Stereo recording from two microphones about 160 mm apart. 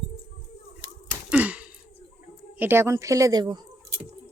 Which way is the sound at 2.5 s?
15° right (ahead or behind).